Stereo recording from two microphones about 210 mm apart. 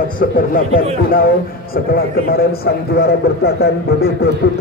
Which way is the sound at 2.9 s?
50° left (ahead or behind).